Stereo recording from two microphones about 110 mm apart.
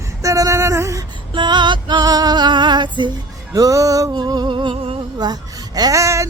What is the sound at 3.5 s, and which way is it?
Music, 30° right (ahead or behind).